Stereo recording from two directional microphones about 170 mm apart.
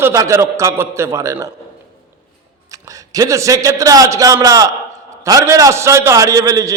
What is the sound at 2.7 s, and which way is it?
A man's voice, 20° right (ahead or behind).